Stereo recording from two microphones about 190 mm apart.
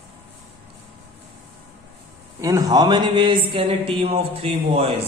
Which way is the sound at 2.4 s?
20° right (ahead or behind).